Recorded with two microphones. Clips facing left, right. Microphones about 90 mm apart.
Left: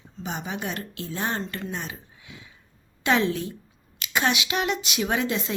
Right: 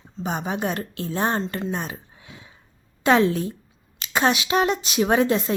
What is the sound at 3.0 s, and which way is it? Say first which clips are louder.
A woman's voice: right 5 dB; 40° right (ahead or behind).